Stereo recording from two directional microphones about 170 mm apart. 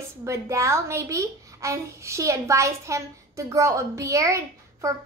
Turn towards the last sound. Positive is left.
turn(degrees=-20)  # may be behind; listen again after turning